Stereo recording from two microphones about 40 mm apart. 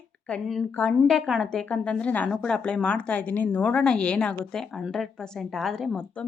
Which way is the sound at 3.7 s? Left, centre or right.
Left.